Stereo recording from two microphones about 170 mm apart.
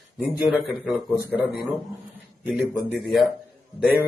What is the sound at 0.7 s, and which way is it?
Speech, 10° left (ahead or behind).